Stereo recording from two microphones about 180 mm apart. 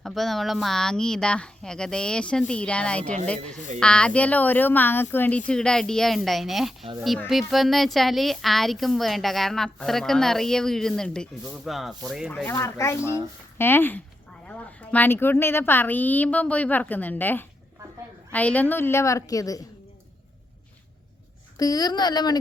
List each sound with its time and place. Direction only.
0.0 s a woman's voice: centre (ahead or behind)
12.3 s a woman's voice: 10° left (ahead or behind)
21.6 s speech: 20° left (ahead or behind)